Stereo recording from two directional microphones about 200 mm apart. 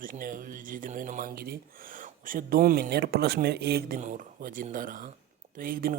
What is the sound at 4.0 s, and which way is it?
Speech, 40° right (ahead or behind).